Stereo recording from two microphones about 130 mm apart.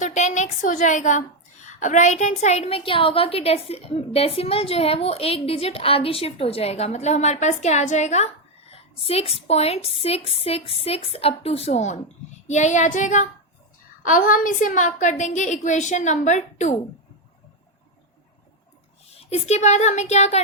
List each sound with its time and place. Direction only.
0.0 s a woman's voice: 65° left (ahead or behind)
9.0 s a woman's voice: 50° left (ahead or behind); by 13.2 s 70° left (ahead or behind)
14.0 s a woman's voice: 90° left; by 16.7 s 65° left (ahead or behind)
19.1 s speech: 55° left (ahead or behind)